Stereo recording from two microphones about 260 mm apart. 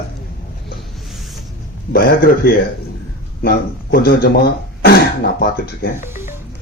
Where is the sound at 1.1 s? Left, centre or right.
Centre.